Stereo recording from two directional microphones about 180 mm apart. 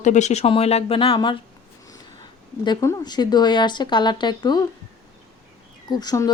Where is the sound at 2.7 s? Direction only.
20° left (ahead or behind).